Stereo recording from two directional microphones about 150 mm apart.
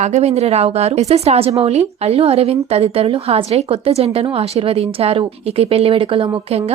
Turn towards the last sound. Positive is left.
turn(degrees=-35)  # may be behind; listen again after turning